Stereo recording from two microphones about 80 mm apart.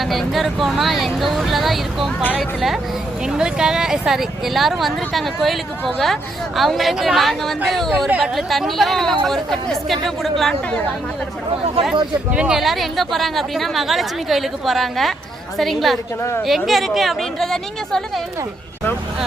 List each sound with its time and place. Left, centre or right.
0.0 s speech: centre
12.3 s speech: centre